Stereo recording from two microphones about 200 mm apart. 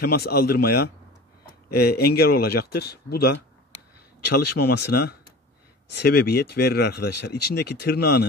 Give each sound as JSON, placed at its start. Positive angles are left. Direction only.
{"t": 0.0, "sound": "speech", "side_deg": 50}
{"t": 4.5, "sound": "speech", "side_deg": 55}